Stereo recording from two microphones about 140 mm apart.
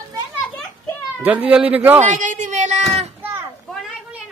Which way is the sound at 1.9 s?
60° right (ahead or behind).